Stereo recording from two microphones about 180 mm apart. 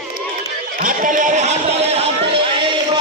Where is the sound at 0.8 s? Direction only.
45° right (ahead or behind).